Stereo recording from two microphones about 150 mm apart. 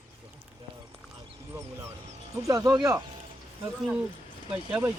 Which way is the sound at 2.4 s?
25° right (ahead or behind).